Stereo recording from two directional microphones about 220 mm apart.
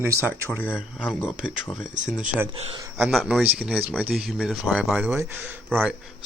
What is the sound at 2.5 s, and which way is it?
Speech, 25° right (ahead or behind).